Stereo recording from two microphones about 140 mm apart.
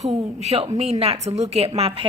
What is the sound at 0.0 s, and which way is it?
A woman's voice, 50° right (ahead or behind).